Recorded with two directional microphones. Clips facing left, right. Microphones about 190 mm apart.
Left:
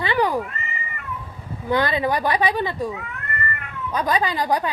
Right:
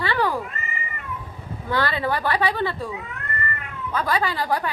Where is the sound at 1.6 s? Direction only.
15° left (ahead or behind).